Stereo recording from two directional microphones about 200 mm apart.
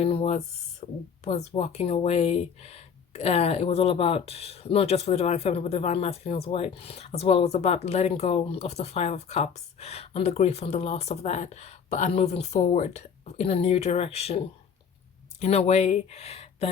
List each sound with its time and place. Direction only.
0.0 s speech: 30° left (ahead or behind)